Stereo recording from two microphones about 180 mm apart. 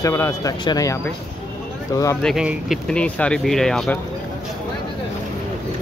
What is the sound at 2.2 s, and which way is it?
Speech, 5° right (ahead or behind).